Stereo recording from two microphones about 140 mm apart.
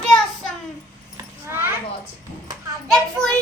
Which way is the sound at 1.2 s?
20° right (ahead or behind).